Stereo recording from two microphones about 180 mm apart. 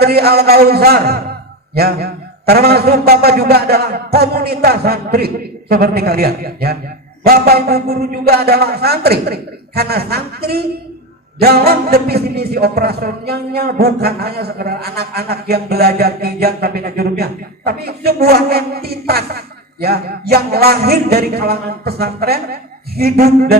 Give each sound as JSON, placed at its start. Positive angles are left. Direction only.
{"t": 0.0, "sound": "a man's voice", "side_deg": -60}